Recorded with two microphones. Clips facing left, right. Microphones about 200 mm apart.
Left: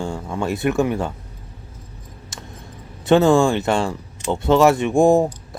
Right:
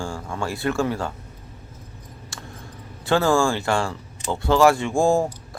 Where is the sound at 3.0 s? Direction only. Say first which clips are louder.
Left 5 dB; 20° left (ahead or behind).